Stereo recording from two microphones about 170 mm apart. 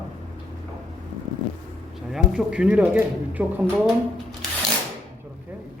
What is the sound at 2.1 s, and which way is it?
Speech, 5° right (ahead or behind).